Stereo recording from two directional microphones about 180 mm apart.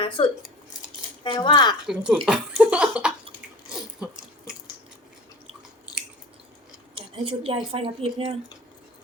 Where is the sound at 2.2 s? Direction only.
5° right (ahead or behind).